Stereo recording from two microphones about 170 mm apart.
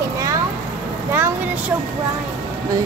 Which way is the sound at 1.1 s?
10° right (ahead or behind).